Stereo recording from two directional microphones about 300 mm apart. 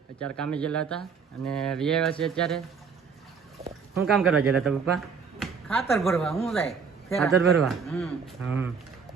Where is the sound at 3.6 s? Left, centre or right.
Right.